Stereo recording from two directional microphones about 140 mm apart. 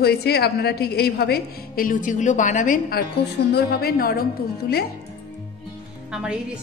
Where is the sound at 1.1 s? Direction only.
90° left; by 3.0 s 70° left (ahead or behind).